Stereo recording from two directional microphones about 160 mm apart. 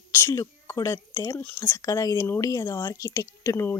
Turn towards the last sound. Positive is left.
turn(degrees=15)  # may be behind; listen again after turning